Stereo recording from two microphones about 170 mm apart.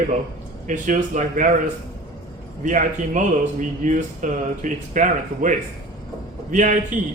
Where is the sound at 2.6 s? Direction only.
45° right (ahead or behind).